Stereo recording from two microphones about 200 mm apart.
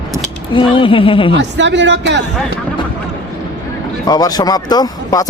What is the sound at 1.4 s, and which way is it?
Speech, 65° right (ahead or behind).